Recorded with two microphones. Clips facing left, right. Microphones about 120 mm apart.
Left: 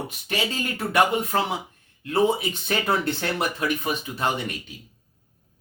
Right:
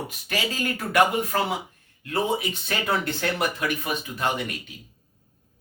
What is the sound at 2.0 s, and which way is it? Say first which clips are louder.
Speech: left 4 dB; 30° left (ahead or behind).